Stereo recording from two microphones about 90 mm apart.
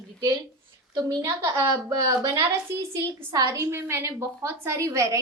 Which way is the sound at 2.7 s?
30° right (ahead or behind).